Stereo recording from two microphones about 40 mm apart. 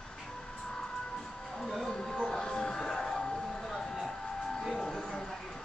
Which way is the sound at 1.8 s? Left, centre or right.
Centre.